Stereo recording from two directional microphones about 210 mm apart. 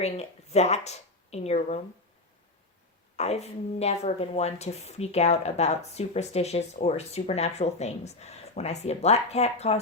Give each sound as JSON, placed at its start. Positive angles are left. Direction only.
{"t": 0.0, "sound": "speech", "side_deg": 30}
{"t": 3.2, "sound": "speech", "side_deg": 30}